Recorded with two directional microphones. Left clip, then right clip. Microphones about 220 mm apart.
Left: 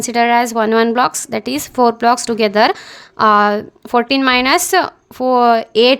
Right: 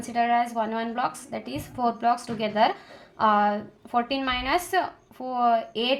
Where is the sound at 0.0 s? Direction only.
45° left (ahead or behind).